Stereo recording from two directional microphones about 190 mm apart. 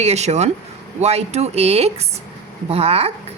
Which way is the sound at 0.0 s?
35° right (ahead or behind).